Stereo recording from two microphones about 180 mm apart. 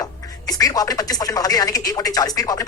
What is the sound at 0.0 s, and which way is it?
Speech, 20° left (ahead or behind).